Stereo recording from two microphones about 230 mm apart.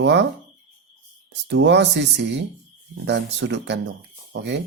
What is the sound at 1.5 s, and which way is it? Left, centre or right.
Speech, right.